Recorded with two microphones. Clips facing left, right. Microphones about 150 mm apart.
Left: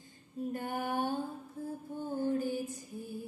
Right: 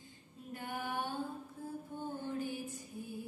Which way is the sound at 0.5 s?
45° left (ahead or behind).